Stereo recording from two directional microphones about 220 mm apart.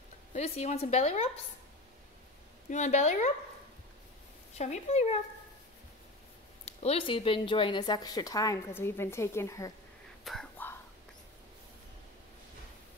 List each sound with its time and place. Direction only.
0.3 s a woman's voice: 30° left (ahead or behind)
2.7 s a woman's voice: 30° left (ahead or behind)
4.6 s a woman's voice: 30° left (ahead or behind)
6.6 s speech: 30° left (ahead or behind)
10.2 s whispering: centre (ahead or behind)